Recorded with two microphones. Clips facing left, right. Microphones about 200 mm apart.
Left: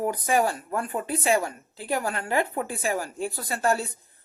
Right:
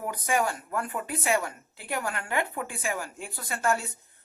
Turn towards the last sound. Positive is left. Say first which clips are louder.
# left 3 dB
turn(degrees=35)  # may be behind; listen again after turning